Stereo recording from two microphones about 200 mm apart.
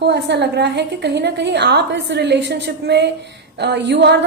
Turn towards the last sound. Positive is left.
turn(degrees=-55)  # may be behind; listen again after turning